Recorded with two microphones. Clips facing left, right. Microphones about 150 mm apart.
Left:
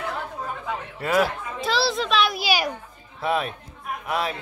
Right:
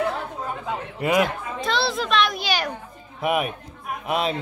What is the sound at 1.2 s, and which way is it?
A child's voice, 5° left (ahead or behind).